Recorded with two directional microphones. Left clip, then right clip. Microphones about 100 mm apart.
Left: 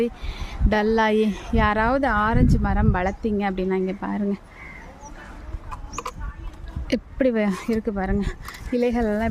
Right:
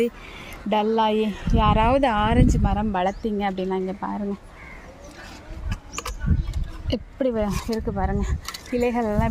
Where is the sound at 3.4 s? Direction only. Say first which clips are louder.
Right 2 dB; 45° left (ahead or behind).